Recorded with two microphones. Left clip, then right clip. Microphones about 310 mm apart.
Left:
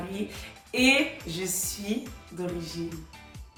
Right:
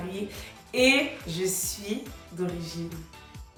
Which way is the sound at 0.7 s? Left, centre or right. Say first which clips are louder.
Right 1 dB; centre.